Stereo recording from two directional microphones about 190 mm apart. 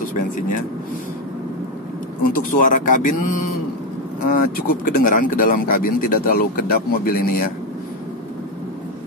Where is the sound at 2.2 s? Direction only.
45° left (ahead or behind).